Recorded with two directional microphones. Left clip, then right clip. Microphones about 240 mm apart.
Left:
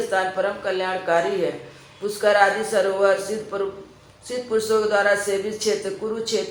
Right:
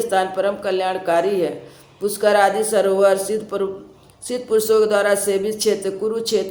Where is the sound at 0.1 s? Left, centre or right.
Right.